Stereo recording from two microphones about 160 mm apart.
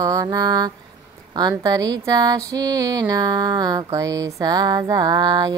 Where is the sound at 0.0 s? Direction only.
25° right (ahead or behind).